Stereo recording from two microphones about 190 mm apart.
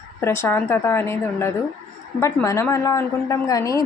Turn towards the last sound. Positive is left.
turn(degrees=15)  # may be behind; listen again after turning